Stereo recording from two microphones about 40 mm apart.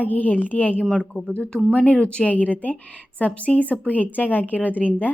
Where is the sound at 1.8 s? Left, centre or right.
Left.